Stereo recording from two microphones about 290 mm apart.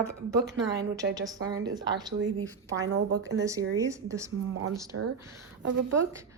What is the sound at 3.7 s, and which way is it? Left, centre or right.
Speech, centre.